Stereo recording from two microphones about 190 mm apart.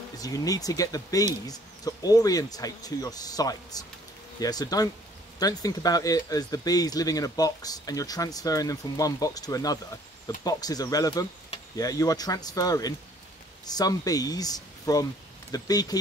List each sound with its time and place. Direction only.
0.2 s speech: 20° left (ahead or behind)